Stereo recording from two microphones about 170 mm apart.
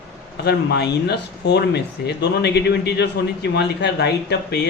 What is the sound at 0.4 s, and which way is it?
Speech, 80° left.